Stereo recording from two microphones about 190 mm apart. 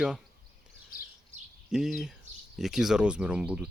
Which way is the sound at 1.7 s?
Centre (ahead or behind).